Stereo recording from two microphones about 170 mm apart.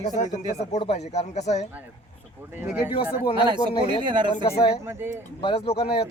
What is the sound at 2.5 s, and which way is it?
Speech, 10° right (ahead or behind).